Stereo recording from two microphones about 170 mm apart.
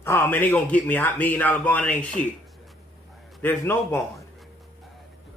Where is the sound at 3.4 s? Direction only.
15° left (ahead or behind).